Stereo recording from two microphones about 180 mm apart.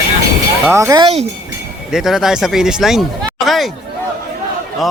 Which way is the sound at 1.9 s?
5° right (ahead or behind).